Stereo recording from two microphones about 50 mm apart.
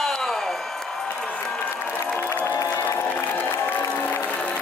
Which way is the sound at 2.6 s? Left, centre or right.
Left.